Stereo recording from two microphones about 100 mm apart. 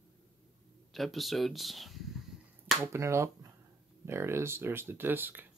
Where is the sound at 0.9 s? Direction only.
Centre (ahead or behind).